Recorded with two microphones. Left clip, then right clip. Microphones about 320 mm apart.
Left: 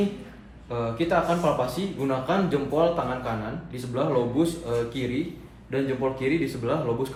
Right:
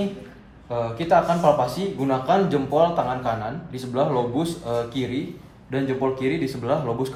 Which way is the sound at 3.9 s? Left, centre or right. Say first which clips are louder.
Right 2 dB; right.